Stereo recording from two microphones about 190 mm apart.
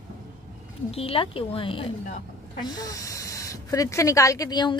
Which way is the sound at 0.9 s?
30° left (ahead or behind).